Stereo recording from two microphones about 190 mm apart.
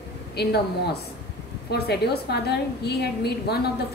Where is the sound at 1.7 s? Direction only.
60° left (ahead or behind).